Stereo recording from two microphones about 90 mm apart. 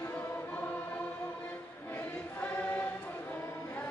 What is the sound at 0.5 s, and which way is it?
Choir, 20° left (ahead or behind).